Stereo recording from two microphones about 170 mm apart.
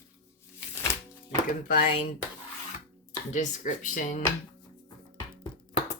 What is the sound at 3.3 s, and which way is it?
Speech, 50° left (ahead or behind).